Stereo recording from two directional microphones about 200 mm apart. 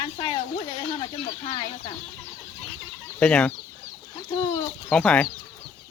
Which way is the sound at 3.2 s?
5° left (ahead or behind).